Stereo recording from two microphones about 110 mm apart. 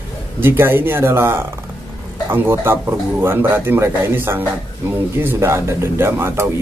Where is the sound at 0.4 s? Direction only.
20° right (ahead or behind).